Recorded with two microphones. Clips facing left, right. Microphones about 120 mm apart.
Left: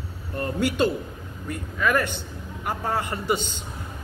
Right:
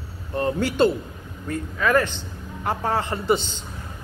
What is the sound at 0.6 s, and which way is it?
A man's voice, 15° left (ahead or behind).